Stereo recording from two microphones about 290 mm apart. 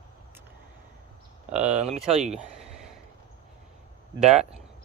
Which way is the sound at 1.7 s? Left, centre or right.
Right.